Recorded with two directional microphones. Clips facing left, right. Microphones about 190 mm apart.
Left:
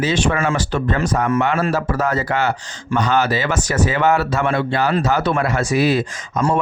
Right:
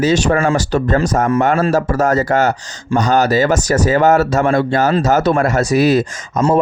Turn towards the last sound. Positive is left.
turn(degrees=-45)  # may be behind; listen again after turning